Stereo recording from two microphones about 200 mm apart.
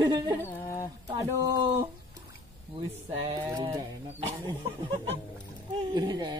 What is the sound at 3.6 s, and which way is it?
Speech, 25° right (ahead or behind).